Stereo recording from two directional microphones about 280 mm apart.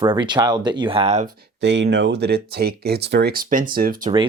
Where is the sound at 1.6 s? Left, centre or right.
Right.